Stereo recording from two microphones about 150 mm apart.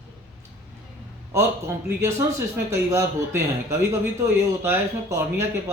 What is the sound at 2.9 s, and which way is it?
Speech, 20° right (ahead or behind).